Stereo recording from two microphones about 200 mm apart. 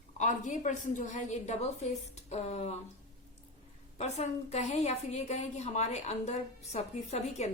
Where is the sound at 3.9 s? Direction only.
35° left (ahead or behind).